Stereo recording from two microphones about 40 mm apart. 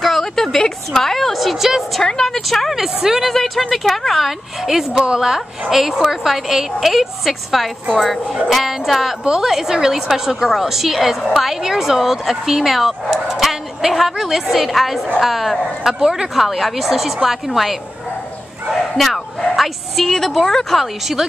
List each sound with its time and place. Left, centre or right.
0.0 s a sound: centre
0.9 s a woman's voice: centre
2.0 s a woman's voice: centre
2.7 s a woman's voice: centre
3.3 s a woman's voice: centre
4.6 s a woman's voice: centre
15.9 s a woman's voice: centre
16.3 s a woman's voice: centre
18.7 s bow-wow: centre
19.5 s a woman's voice: centre
20.8 s a woman's voice: centre